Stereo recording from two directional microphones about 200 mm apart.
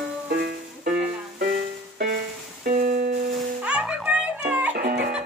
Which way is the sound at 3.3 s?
5° right (ahead or behind).